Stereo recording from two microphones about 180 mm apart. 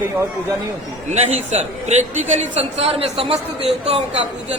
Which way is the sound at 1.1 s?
40° right (ahead or behind).